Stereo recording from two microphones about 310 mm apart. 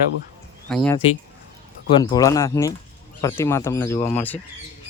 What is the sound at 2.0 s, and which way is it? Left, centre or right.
Speech, centre.